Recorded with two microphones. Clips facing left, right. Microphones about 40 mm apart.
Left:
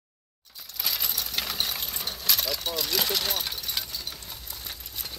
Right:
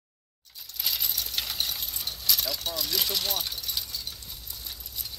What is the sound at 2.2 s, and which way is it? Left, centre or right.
Vehicle, left.